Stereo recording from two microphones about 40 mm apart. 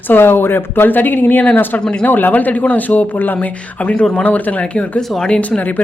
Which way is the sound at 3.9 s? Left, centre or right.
Left.